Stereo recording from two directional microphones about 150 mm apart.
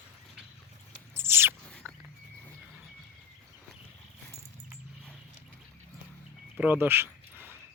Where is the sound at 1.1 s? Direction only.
15° right (ahead or behind).